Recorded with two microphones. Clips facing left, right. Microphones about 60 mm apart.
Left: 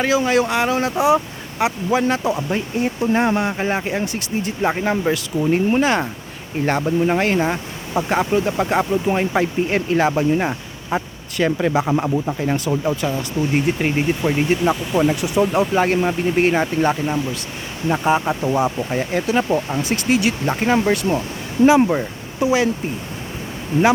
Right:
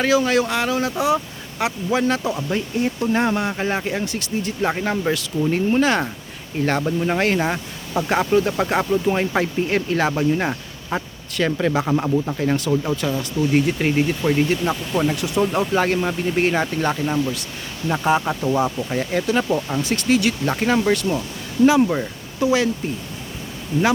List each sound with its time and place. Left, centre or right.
0.0 s speech: centre; by 0.9 s left
0.9 s speech: centre
13.1 s speech: left
19.9 s speech: centre; by 21.8 s left
21.8 s speech: centre
23.7 s speech: left